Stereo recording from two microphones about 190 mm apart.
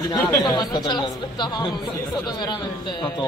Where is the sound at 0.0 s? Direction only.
15° left (ahead or behind).